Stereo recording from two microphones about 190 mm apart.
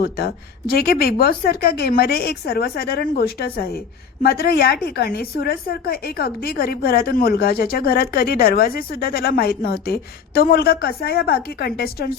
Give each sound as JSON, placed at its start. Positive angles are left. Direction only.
{"t": 0.7, "sound": "a woman's voice", "side_deg": 55}